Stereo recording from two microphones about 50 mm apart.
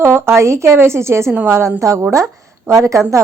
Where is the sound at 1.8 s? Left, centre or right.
Right.